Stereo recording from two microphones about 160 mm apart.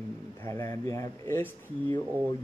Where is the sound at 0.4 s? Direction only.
20° left (ahead or behind).